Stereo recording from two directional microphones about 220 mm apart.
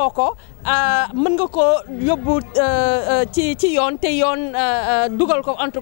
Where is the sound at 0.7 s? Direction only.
15° left (ahead or behind).